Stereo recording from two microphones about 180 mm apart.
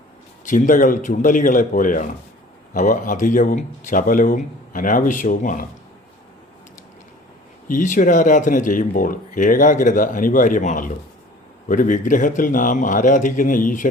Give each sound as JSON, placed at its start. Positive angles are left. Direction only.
{"t": 0.4, "sound": "speech", "side_deg": 45}
{"t": 7.7, "sound": "speech", "side_deg": 45}